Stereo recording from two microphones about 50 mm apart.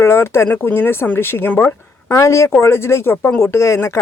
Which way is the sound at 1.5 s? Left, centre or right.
Left.